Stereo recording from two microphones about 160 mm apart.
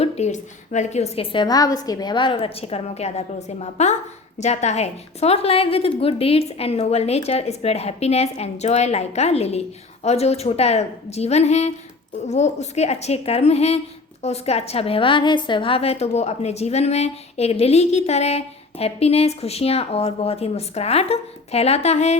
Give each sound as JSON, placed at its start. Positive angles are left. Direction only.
{"t": 0.0, "sound": "a woman's voice", "side_deg": 45}